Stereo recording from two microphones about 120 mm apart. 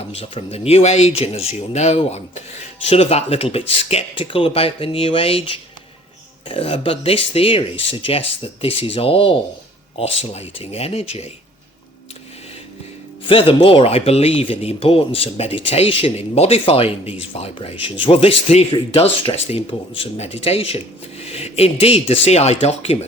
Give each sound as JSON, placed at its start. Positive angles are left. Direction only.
{"t": 0.1, "sound": "speech", "side_deg": 55}
{"t": 4.1, "sound": "speech", "side_deg": 50}
{"t": 13.2, "sound": "speech", "side_deg": 45}